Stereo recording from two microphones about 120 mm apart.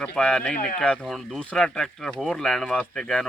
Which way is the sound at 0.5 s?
90° left.